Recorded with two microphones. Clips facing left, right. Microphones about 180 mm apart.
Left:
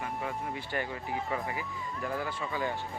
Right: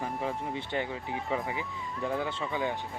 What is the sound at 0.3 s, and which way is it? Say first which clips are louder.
Speech: right 2 dB; 25° right (ahead or behind).